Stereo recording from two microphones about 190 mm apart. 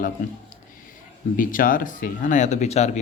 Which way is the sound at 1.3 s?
45° left (ahead or behind).